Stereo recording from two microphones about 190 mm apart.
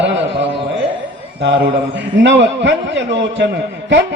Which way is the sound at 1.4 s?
70° right (ahead or behind).